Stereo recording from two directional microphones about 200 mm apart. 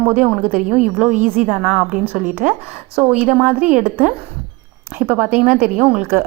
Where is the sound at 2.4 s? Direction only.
45° right (ahead or behind).